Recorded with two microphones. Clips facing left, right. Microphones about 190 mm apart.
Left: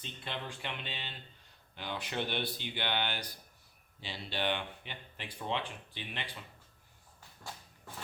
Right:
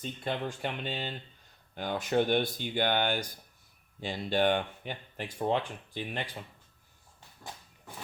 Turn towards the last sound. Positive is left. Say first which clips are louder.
# right 2 dB
turn(degrees=-20)  # may be behind; listen again after turning